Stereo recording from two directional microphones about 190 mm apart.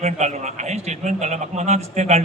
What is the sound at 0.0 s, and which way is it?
A man's voice, 35° right (ahead or behind).